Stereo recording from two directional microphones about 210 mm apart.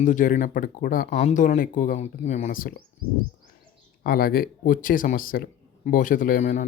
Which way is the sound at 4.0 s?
45° left (ahead or behind).